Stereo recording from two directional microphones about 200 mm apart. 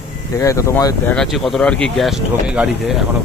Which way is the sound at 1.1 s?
Centre (ahead or behind).